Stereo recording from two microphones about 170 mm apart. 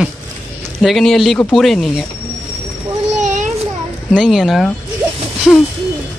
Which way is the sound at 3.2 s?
45° right (ahead or behind).